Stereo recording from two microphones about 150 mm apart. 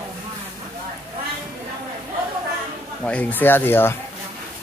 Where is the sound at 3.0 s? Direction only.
10° left (ahead or behind).